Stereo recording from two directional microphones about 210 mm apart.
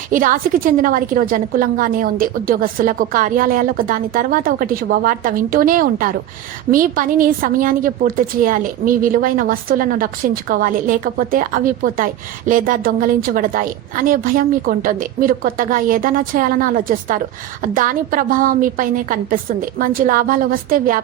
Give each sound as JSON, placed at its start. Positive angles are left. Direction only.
{"t": 0.1, "sound": "a woman's voice", "side_deg": -40}